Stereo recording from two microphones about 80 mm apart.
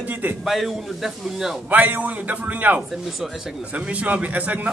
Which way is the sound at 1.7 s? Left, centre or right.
Centre.